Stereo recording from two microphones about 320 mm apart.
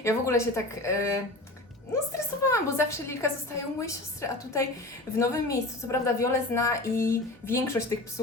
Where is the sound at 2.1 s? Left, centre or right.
Centre.